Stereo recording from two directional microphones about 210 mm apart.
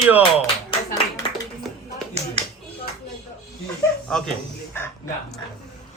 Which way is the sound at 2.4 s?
30° right (ahead or behind).